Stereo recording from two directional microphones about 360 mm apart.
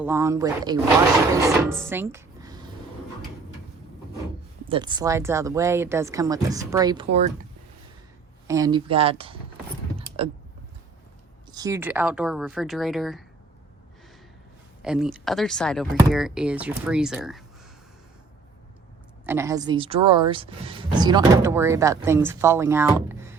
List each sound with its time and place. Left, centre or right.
0.0 s speech: centre
1.8 s a sound: centre
4.7 s speech: centre
8.4 s speech: centre
10.2 s a sound: centre
11.5 s speech: centre
14.8 s speech: centre
19.2 s speech: centre